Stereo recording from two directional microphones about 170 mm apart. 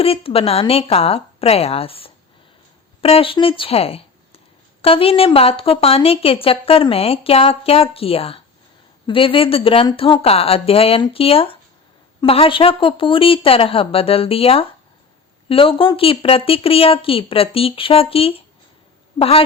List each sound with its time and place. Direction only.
0.0 s a woman's voice: 35° left (ahead or behind)